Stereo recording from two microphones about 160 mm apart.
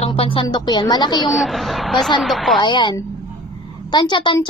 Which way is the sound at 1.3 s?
Centre (ahead or behind).